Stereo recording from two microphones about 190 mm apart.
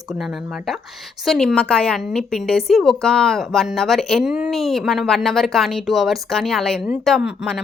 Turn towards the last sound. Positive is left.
turn(degrees=0)  # may be behind; listen again after turning